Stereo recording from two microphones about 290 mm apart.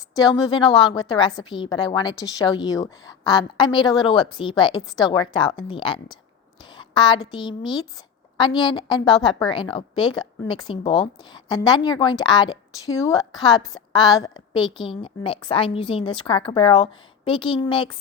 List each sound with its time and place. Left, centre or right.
0.2 s a woman's voice: centre
6.6 s a sound: centre
7.3 s a woman's voice: centre